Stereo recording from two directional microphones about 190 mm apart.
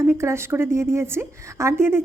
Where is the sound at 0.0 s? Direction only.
15° right (ahead or behind).